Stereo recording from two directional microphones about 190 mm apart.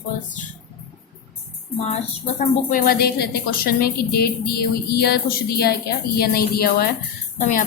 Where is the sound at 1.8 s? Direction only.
40° left (ahead or behind).